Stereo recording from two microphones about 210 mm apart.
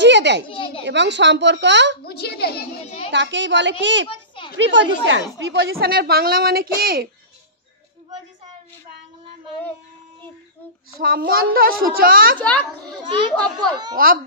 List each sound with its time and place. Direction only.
0.0 s children playing: 55° right (ahead or behind)
0.5 s a sound: 25° left (ahead or behind)
0.8 s a woman's voice: 55° right (ahead or behind)
2.0 s a child's voice: 50° left (ahead or behind)
3.1 s a woman's voice: 60° right (ahead or behind)
11.0 s a woman's voice: 45° right (ahead or behind)
12.4 s a child's voice: 5° left (ahead or behind)
13.9 s a woman's voice: 45° right (ahead or behind)